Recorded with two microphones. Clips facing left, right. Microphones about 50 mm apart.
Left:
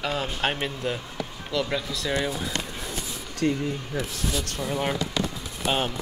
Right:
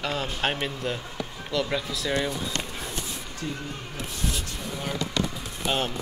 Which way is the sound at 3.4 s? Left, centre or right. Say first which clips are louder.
Left 10 dB; left.